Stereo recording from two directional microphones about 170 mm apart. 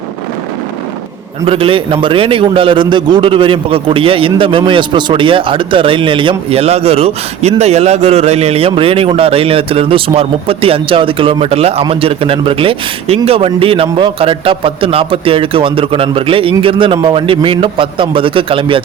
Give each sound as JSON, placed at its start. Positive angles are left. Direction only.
{"t": 1.5, "sound": "a man's voice", "side_deg": -30}